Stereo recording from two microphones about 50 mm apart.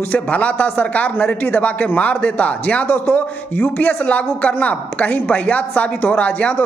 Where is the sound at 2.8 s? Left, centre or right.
Left.